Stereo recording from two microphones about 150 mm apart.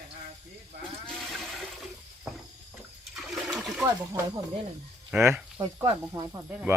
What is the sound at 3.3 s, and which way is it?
Water, centre (ahead or behind).